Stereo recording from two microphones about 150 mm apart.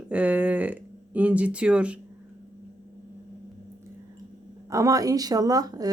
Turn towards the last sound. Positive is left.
turn(degrees=-25)  # may be behind; listen again after turning